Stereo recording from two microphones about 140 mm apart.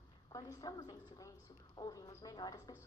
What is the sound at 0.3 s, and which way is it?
A woman's voice, 25° left (ahead or behind).